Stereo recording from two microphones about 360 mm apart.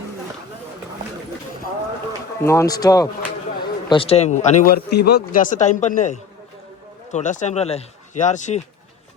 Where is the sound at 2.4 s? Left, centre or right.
Centre.